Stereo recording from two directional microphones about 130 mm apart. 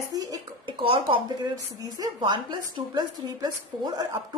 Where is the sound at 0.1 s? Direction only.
30° right (ahead or behind).